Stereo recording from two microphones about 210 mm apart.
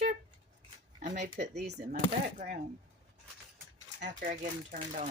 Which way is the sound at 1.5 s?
50° right (ahead or behind).